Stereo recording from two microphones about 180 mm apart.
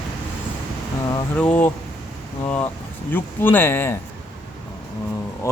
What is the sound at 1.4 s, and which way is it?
Speech, 5° left (ahead or behind).